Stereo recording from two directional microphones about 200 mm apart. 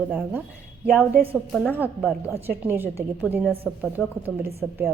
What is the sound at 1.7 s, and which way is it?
A woman's voice, 5° right (ahead or behind).